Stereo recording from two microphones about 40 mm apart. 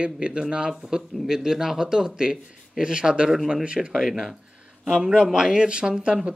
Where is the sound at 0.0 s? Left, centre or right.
Right.